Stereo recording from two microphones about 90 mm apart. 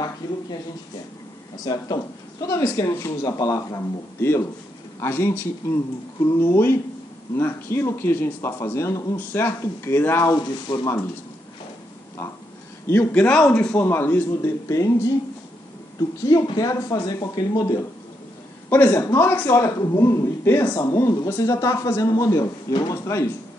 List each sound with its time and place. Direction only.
1.6 s speech: 45° left (ahead or behind)
2.4 s speech: 35° left (ahead or behind)
10.3 s speech: 55° left (ahead or behind)
12.8 s a man's voice: 35° left (ahead or behind)
13.1 s speech: 15° left (ahead or behind)
14.7 s speech: 40° left (ahead or behind)
16.2 s speech: 40° left (ahead or behind)
18.7 s speech: 25° left (ahead or behind)
20.7 s speech: 40° left (ahead or behind)
22.9 s speech: 35° left (ahead or behind)